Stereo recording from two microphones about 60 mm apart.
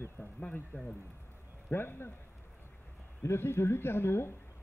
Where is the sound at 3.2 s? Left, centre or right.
Left.